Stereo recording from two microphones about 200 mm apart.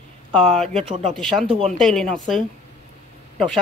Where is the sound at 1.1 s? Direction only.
Centre (ahead or behind).